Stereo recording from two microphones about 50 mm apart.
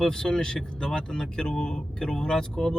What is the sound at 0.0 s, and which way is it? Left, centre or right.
Speech, centre.